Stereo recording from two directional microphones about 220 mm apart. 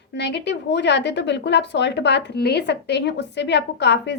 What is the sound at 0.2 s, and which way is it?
A woman's voice, 50° left (ahead or behind).